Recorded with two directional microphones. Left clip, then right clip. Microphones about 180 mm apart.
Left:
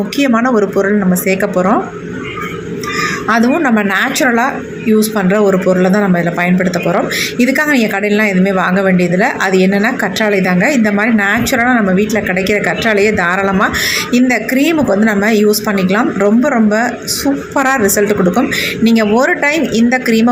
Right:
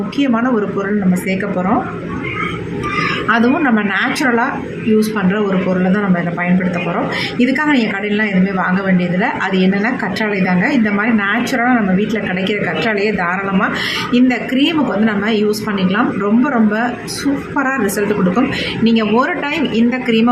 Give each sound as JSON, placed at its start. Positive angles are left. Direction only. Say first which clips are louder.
{"t": 0.2, "sound": "speech", "louder": "left 4 dB", "side_deg": 25}
{"t": 3.2, "sound": "speech", "louder": "left 2 dB", "side_deg": 20}